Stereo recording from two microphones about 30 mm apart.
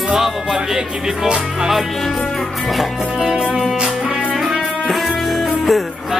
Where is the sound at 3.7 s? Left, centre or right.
Right.